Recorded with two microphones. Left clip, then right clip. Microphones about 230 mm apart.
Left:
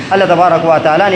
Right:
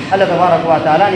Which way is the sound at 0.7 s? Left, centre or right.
Left.